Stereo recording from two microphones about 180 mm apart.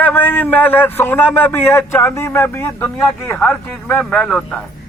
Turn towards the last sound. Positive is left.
turn(degrees=5)  # may be behind; listen again after turning